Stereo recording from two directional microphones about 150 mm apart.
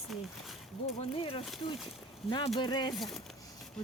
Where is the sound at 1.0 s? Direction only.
40° left (ahead or behind).